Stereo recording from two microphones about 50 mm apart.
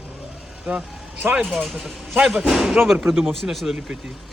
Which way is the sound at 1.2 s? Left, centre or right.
Right.